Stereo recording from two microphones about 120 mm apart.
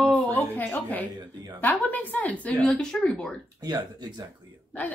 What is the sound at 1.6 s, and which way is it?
Speech, 15° left (ahead or behind).